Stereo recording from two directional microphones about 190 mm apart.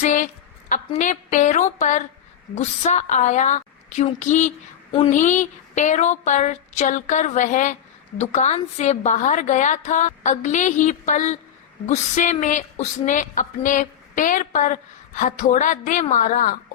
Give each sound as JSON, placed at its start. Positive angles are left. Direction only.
{"t": 0.0, "sound": "a sound", "side_deg": 40}
{"t": 0.7, "sound": "a woman's voice", "side_deg": 40}
{"t": 4.9, "sound": "speech", "side_deg": 30}
{"t": 5.1, "sound": "a woman's voice", "side_deg": 40}